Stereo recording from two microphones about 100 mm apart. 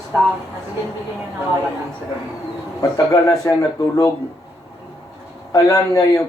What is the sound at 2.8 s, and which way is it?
A man's voice, 35° left (ahead or behind).